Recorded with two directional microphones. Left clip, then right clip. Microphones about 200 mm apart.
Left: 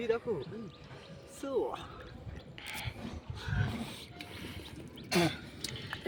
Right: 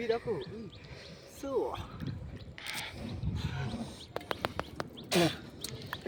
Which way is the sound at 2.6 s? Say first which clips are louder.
Right 3 dB; centre (ahead or behind).